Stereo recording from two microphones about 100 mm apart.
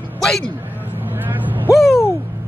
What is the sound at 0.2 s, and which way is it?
Speech, 5° left (ahead or behind).